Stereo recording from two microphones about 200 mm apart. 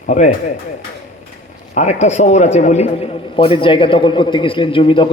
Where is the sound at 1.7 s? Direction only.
35° left (ahead or behind).